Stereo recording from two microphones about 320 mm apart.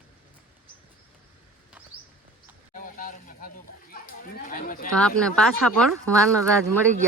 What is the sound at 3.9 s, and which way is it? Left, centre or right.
Speech, left.